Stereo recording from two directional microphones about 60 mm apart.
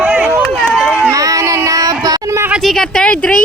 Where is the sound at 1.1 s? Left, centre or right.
Right.